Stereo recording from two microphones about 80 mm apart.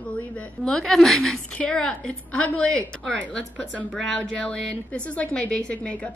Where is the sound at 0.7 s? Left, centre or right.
Centre.